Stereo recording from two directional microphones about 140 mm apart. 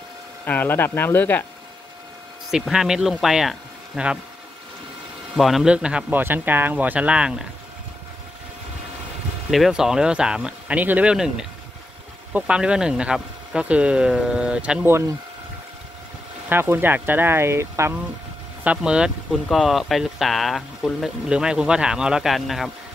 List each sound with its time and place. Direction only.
0.5 s speech: 15° left (ahead or behind)
2.5 s speech: 5° right (ahead or behind)
5.3 s speech: centre (ahead or behind)
9.5 s speech: centre (ahead or behind)
14.9 s speech: 20° right (ahead or behind)
16.4 s speech: 15° right (ahead or behind)
18.6 s speech: 10° right (ahead or behind)